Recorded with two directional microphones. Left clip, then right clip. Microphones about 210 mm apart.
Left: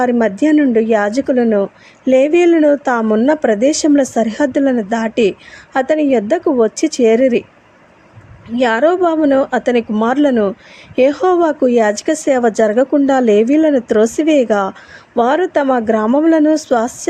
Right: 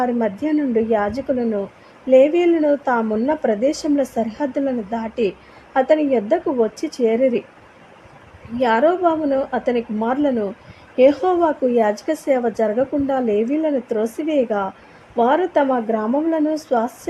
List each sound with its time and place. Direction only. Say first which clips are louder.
0.0 s speech: left 7 dB; 20° left (ahead or behind)
8.5 s speech: left 4 dB; 20° left (ahead or behind)